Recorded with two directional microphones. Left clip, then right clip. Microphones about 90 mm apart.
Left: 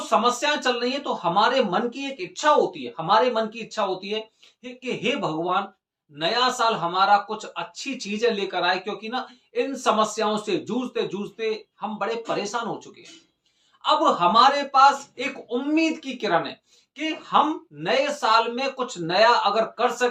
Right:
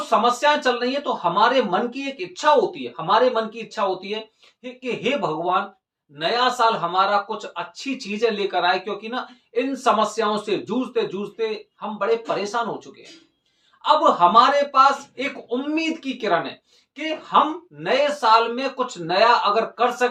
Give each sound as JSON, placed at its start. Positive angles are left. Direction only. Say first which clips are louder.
{"t": 0.2, "sound": "speech", "louder": "right 4 dB", "side_deg": 35}
{"t": 13.8, "sound": "speech", "louder": "right 4 dB", "side_deg": 35}